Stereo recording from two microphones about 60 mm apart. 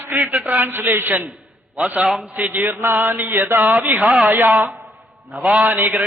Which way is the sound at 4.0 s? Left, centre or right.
Centre.